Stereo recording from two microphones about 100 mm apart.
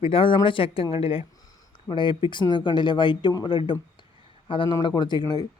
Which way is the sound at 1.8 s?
55° left (ahead or behind).